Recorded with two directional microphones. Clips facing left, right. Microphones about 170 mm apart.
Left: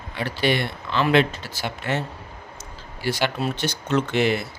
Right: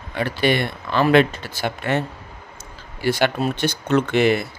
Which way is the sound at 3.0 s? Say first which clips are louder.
Right 4 dB; 55° right (ahead or behind).